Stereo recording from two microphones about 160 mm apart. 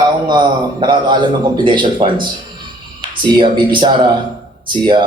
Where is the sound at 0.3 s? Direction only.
30° right (ahead or behind).